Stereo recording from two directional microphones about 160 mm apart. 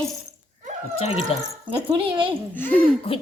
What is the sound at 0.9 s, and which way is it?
Speech, 40° left (ahead or behind).